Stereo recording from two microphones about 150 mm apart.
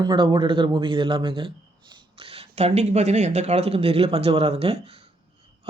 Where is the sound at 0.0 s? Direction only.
30° right (ahead or behind).